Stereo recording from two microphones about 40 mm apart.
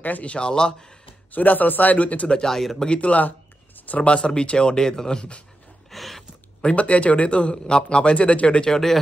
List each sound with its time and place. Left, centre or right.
0.0 s a man's voice: left
0.3 s a man's voice: left
1.3 s a man's voice: left
2.2 s a man's voice: left
2.5 s speech: centre
2.9 s a sound: left
4.0 s a man's voice: left
5.9 s a sound: centre
6.6 s a man's voice: left
8.6 s speech: centre